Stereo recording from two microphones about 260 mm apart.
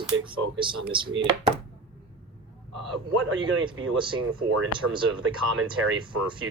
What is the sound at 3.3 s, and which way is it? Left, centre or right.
Speech, right.